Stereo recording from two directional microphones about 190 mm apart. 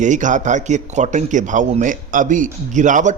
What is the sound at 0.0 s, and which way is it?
A man's voice, 40° right (ahead or behind).